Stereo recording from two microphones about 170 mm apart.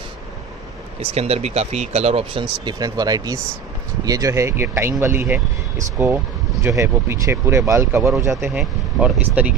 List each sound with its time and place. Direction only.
1.0 s speech: 35° right (ahead or behind); by 9.5 s 10° right (ahead or behind)